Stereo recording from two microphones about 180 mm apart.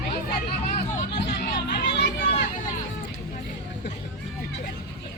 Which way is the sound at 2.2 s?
45° left (ahead or behind).